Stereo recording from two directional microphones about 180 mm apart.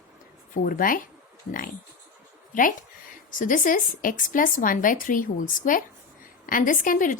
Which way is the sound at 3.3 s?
50° left (ahead or behind).